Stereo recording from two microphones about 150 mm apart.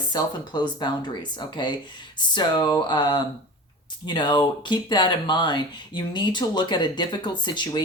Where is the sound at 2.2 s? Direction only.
30° left (ahead or behind).